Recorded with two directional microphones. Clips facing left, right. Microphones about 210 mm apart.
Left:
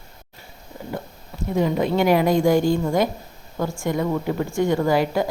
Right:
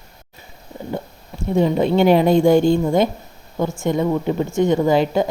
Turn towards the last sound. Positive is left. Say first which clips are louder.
# right 3 dB
turn(degrees=-20)  # may be behind; listen again after turning